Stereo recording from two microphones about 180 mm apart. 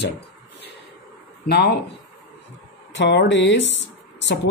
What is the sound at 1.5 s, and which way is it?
Speech, 65° left (ahead or behind).